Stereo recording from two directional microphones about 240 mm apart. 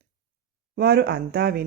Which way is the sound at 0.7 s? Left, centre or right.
Right.